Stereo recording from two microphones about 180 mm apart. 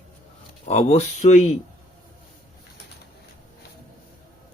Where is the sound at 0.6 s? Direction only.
35° left (ahead or behind).